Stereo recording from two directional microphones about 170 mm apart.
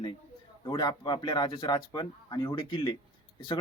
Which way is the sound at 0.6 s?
25° left (ahead or behind).